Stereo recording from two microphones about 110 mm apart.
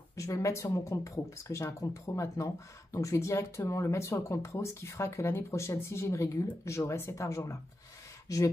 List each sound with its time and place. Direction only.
0.1 s speech: 30° left (ahead or behind)